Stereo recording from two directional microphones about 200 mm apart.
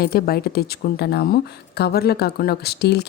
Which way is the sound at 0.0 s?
50° left (ahead or behind).